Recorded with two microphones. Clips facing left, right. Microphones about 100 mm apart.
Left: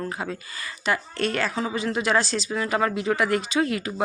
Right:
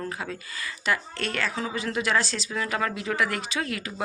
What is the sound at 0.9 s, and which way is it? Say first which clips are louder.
Speech: left 3 dB; 30° left (ahead or behind).